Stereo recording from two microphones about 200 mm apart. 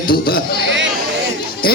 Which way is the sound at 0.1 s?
50° left (ahead or behind).